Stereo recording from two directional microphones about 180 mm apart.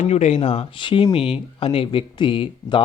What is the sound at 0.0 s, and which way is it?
Speech, 35° left (ahead or behind).